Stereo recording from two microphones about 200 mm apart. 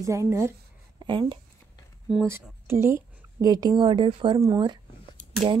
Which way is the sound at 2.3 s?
10° right (ahead or behind).